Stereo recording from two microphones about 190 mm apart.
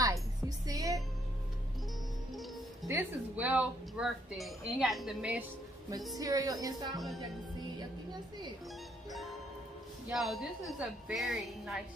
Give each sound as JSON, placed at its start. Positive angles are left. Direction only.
{"t": 0.0, "sound": "music", "side_deg": -20}
{"t": 2.9, "sound": "speech", "side_deg": -10}
{"t": 6.1, "sound": "a woman's voice", "side_deg": -20}
{"t": 10.1, "sound": "speech", "side_deg": 0}